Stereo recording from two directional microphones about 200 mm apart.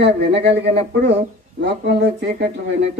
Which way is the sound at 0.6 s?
30° right (ahead or behind).